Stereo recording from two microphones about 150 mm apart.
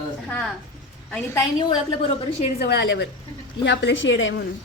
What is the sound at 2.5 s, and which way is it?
Speech, 90° left.